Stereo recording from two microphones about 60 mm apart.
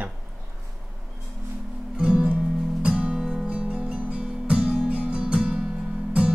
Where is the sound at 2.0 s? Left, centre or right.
Centre.